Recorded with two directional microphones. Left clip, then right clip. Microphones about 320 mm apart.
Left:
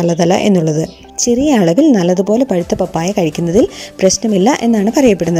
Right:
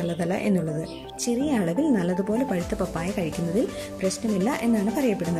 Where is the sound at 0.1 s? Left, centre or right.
Left.